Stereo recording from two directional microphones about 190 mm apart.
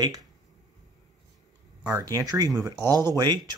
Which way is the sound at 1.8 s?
20° right (ahead or behind).